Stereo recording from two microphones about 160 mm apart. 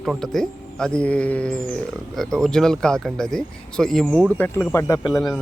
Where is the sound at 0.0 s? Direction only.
Centre (ahead or behind); by 5.1 s 20° left (ahead or behind).